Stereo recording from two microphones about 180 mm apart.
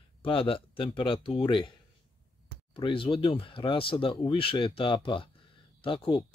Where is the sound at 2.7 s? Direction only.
30° left (ahead or behind).